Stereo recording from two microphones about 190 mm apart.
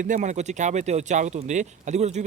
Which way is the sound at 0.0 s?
45° right (ahead or behind).